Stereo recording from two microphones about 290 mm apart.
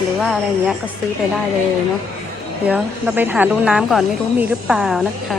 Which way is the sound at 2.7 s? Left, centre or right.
Centre.